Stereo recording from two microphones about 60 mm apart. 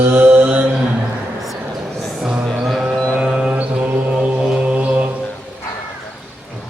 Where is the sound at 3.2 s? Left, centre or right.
Centre.